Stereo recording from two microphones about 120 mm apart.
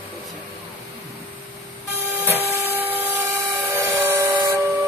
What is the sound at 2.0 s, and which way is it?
Vehicle, 20° right (ahead or behind).